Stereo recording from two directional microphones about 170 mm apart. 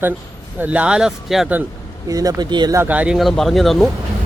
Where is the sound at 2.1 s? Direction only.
20° right (ahead or behind).